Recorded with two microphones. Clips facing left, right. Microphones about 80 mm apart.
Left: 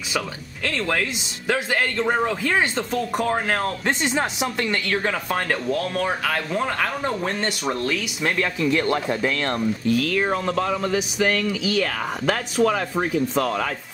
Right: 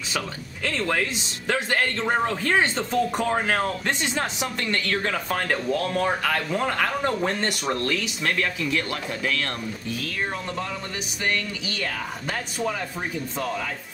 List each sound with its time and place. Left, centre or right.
0.7 s speech: centre
3.8 s speech: centre
5.5 s speech: centre
8.5 s speech: left
9.9 s speech: left